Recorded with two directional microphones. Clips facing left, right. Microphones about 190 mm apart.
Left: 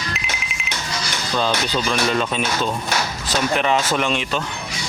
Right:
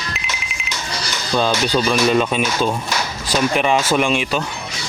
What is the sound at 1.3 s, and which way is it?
Speech, 15° right (ahead or behind).